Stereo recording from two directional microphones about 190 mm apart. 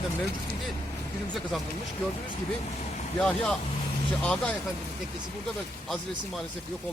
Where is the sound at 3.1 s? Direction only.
5° left (ahead or behind).